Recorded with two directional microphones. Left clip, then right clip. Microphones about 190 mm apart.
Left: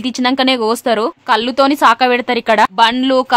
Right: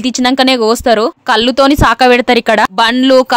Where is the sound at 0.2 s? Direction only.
25° right (ahead or behind).